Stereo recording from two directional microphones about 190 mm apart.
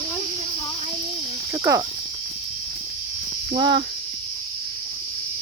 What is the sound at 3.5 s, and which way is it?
Speech, 25° right (ahead or behind).